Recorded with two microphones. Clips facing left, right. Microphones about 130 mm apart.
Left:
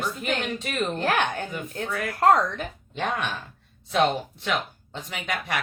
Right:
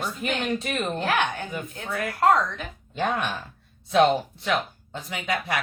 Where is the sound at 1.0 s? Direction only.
45° left (ahead or behind).